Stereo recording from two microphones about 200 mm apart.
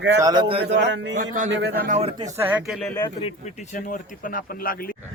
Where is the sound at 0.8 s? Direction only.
65° right (ahead or behind).